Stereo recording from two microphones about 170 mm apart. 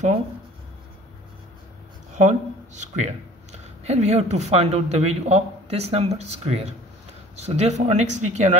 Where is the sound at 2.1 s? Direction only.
45° right (ahead or behind).